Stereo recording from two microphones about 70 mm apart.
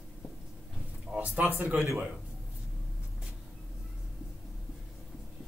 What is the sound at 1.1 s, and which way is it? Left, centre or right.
Speech, right.